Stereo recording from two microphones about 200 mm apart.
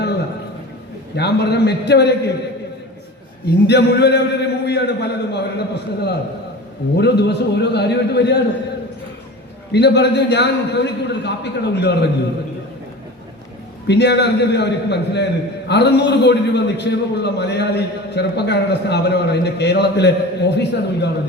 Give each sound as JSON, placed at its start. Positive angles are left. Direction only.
{"t": 1.1, "sound": "a man's voice", "side_deg": 55}
{"t": 3.7, "sound": "a man's voice", "side_deg": 55}
{"t": 9.7, "sound": "a man's voice", "side_deg": 55}
{"t": 13.8, "sound": "a man's voice", "side_deg": 60}